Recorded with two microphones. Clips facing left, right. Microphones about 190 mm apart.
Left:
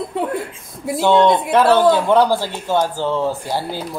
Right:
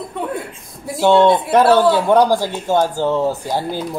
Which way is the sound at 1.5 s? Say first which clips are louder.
Right 1 dB; 15° right (ahead or behind).